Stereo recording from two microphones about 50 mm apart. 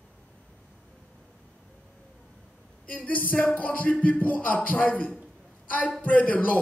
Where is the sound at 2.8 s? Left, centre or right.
Left.